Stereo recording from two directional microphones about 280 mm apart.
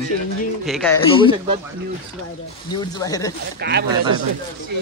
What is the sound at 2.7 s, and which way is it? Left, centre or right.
Speech, centre.